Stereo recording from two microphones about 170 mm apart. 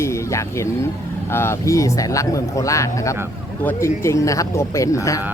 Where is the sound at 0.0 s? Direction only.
15° left (ahead or behind).